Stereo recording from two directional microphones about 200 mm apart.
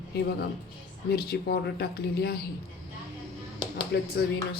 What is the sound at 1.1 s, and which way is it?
Speech, 50° left (ahead or behind).